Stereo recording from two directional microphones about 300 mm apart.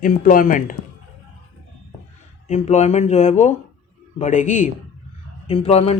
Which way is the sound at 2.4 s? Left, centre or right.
Left.